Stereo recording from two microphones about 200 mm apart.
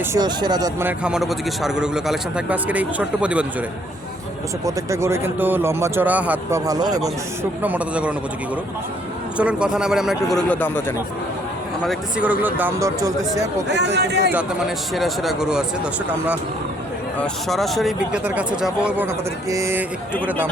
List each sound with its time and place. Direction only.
0.1 s a man's voice: 20° right (ahead or behind)
4.6 s a man's voice: 15° right (ahead or behind)
7.6 s a man's voice: 5° right (ahead or behind)
9.4 s speech: 5° right (ahead or behind)
11.9 s a man's voice: 5° right (ahead or behind)
13.7 s speech: 60° right (ahead or behind)
14.9 s speech: centre (ahead or behind)
17.2 s speech: centre (ahead or behind); by 19.8 s 15° right (ahead or behind)